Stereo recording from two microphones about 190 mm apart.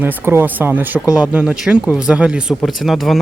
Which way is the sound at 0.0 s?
10° right (ahead or behind).